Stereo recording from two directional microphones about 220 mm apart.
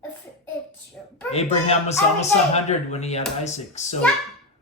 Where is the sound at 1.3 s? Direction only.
30° left (ahead or behind).